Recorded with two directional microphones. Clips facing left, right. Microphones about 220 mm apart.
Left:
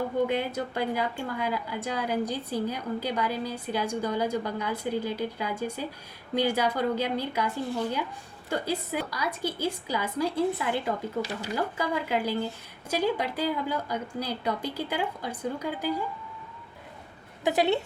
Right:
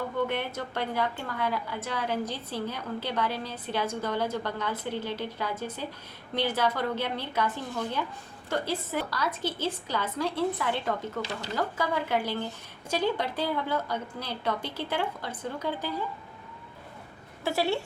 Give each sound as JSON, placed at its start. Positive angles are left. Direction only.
{"t": 0.3, "sound": "speech", "side_deg": 10}
{"t": 17.4, "sound": "speech", "side_deg": 20}